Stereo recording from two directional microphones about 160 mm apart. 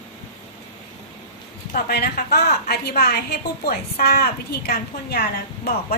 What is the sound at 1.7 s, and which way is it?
A woman's voice, 80° left.